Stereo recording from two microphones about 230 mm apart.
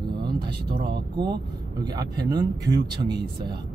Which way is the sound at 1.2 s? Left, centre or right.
Centre.